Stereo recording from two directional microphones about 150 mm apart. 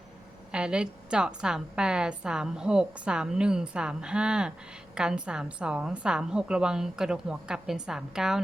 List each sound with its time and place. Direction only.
0.5 s a woman's voice: 5° right (ahead or behind)